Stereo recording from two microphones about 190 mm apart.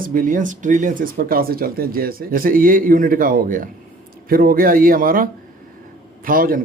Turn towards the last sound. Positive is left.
turn(degrees=-45)  # may be behind; listen again after turning